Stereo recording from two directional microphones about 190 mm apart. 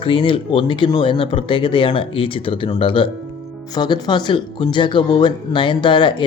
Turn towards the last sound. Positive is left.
turn(degrees=25)  # may be behind; listen again after turning